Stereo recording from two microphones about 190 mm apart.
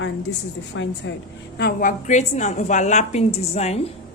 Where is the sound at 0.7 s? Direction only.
90° left.